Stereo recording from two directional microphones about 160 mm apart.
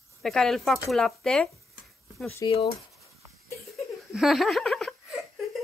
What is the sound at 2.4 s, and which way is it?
Speech, 25° left (ahead or behind).